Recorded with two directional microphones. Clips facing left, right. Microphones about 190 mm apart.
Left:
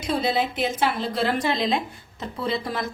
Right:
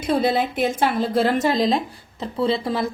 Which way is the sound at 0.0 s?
55° right (ahead or behind).